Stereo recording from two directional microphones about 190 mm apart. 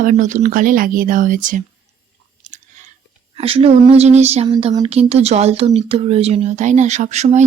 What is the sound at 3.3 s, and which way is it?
Speech, 30° right (ahead or behind).